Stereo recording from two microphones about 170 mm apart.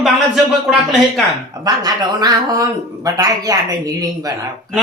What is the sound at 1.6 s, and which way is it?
Speech, 25° right (ahead or behind).